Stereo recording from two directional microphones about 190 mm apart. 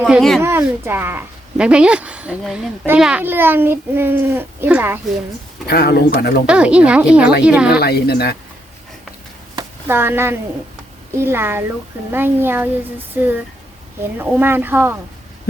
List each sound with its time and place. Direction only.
0.0 s a woman's voice: centre (ahead or behind)
0.4 s speech: 10° right (ahead or behind)
5.6 s speech: 55° left (ahead or behind)
6.5 s a woman's voice: 5° right (ahead or behind)
7.8 s speech: 55° left (ahead or behind)
9.6 s a sound: 10° right (ahead or behind)
11.2 s speech: 10° right (ahead or behind)